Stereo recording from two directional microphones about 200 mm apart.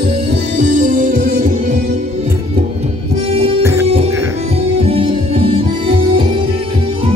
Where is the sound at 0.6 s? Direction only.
40° right (ahead or behind).